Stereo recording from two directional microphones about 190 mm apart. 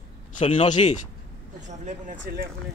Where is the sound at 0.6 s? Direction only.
40° left (ahead or behind).